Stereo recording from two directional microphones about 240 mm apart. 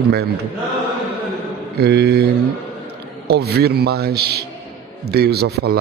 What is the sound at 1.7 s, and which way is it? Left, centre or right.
Mantra, right.